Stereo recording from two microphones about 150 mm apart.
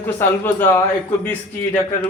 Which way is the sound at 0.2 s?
15° left (ahead or behind).